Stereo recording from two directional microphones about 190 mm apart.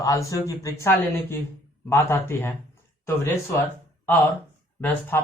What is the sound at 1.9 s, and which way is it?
Speech, 15° left (ahead or behind).